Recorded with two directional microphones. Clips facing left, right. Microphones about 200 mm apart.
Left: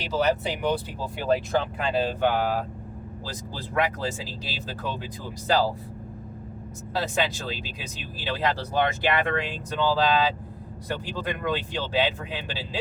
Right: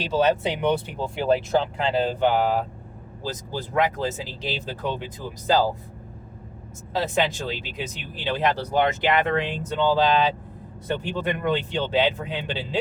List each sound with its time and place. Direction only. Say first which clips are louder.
0.1 s speech: right 3 dB; 25° right (ahead or behind)
6.9 s speech: right 3 dB; 20° right (ahead or behind)